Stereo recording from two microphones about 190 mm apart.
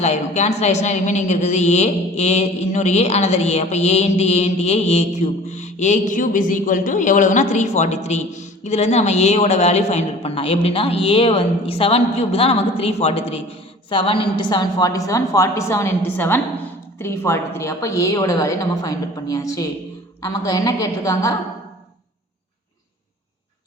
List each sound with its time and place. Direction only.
0.0 s a woman's voice: 35° left (ahead or behind); by 21.3 s 15° left (ahead or behind)